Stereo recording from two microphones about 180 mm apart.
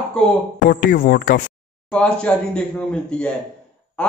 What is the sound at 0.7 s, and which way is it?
Speech, 50° left (ahead or behind).